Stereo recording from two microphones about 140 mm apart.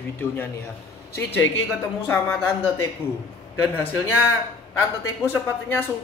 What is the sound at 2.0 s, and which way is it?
Speech, 15° left (ahead or behind).